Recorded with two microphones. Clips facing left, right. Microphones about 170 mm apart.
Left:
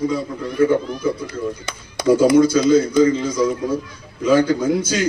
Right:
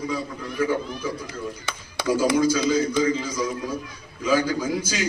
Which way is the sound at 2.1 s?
60° left (ahead or behind).